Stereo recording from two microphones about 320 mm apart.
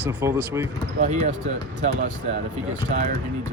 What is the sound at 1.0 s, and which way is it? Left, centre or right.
Speech, right.